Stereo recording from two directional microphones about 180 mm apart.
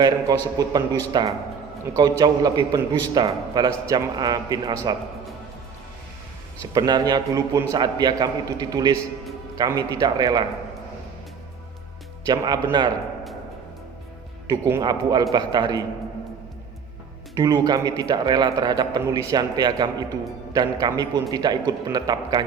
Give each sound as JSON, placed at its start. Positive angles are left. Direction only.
{"t": 0.3, "sound": "a man's voice", "side_deg": -20}
{"t": 6.7, "sound": "a man's voice", "side_deg": -20}
{"t": 12.2, "sound": "a man's voice", "side_deg": -20}
{"t": 14.7, "sound": "a man's voice", "side_deg": -20}
{"t": 17.3, "sound": "a man's voice", "side_deg": -25}